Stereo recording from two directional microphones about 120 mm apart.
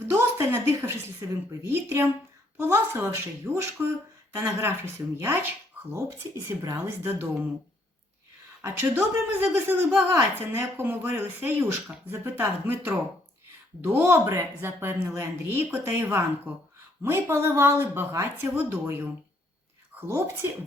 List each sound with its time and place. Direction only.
0.1 s a woman's voice: 20° right (ahead or behind)
8.6 s a woman's voice: 20° right (ahead or behind)